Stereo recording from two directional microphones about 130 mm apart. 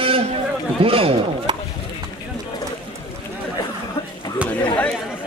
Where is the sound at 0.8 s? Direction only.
45° right (ahead or behind).